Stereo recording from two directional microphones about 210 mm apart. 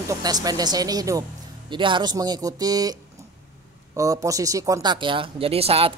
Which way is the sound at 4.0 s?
15° right (ahead or behind).